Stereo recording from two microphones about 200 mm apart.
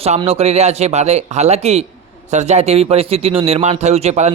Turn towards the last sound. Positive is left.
turn(degrees=-35)  # may be behind; listen again after turning